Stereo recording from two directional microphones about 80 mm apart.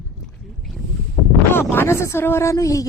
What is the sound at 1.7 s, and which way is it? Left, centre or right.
Speech, left.